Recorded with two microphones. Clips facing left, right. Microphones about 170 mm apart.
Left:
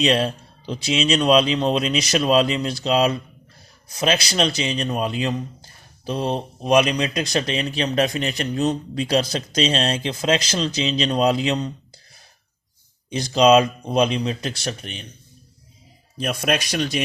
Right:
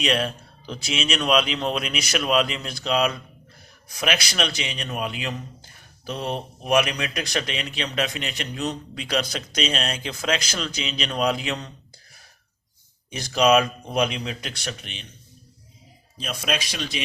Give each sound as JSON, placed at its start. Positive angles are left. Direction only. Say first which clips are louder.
{"t": 0.0, "sound": "a man's voice", "louder": "left 5 dB", "side_deg": 30}
{"t": 13.1, "sound": "speech", "louder": "left 4 dB", "side_deg": 25}
{"t": 16.1, "sound": "speech", "louder": "left 5 dB", "side_deg": 55}